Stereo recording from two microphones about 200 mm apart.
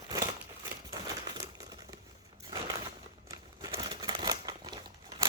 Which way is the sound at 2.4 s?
20° right (ahead or behind).